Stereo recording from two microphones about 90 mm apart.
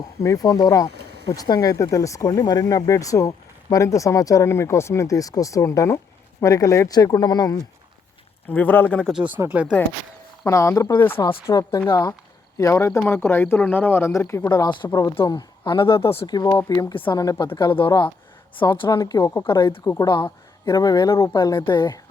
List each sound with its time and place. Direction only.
0.2 s speech: 40° left (ahead or behind)
8.4 s speech: 20° left (ahead or behind)
9.1 s speech: 15° right (ahead or behind)
10.4 s speech: 35° left (ahead or behind)
11.9 s speech: 50° left (ahead or behind)
12.5 s speech: 35° left (ahead or behind)
14.5 s speech: 55° left (ahead or behind)
14.8 s speech: 35° left (ahead or behind)
15.3 s speech: 55° left (ahead or behind)
16.2 s speech: 45° left (ahead or behind)
16.9 s a woman's voice: 70° left (ahead or behind)
18.6 s speech: 50° left (ahead or behind)
19.2 s speech: 35° left (ahead or behind)
21.3 s speech: 55° left (ahead or behind)